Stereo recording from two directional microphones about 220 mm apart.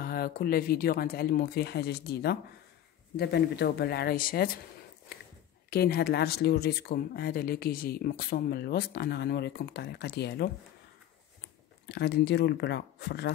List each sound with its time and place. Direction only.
0.0 s speech: 45° left (ahead or behind)
5.1 s walk: 45° left (ahead or behind)
5.7 s speech: 45° left (ahead or behind)
11.8 s speech: 50° left (ahead or behind)